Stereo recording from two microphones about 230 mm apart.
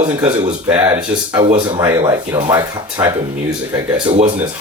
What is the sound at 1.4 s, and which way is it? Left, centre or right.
Speech, right.